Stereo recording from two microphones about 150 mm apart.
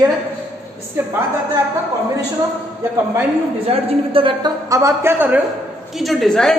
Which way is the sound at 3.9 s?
40° right (ahead or behind).